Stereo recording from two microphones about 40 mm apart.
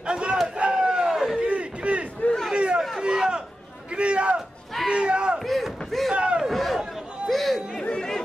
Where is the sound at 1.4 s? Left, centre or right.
Right.